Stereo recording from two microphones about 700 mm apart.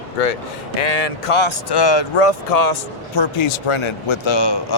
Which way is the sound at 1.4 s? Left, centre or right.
Left.